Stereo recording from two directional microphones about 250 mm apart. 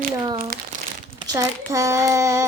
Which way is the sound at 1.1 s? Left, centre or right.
Centre.